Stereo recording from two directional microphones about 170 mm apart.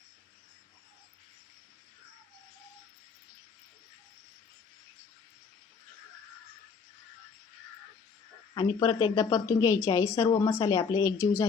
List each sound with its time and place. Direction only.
8.5 s speech: 25° left (ahead or behind)
9.7 s a woman's voice: 20° left (ahead or behind)